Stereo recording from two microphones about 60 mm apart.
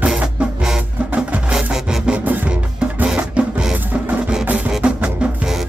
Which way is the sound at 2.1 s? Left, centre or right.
Right.